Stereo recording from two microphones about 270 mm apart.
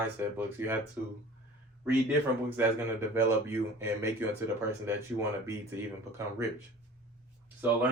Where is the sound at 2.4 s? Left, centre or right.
Centre.